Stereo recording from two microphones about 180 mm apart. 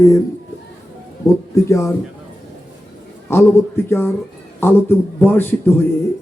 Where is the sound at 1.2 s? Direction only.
15° left (ahead or behind).